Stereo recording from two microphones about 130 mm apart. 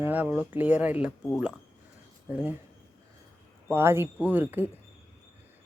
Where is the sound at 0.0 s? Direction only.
15° right (ahead or behind).